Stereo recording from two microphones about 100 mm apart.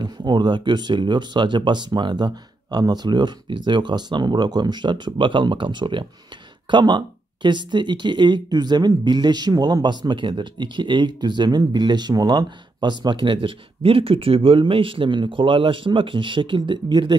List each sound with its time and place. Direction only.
0.0 s speech: 45° right (ahead or behind)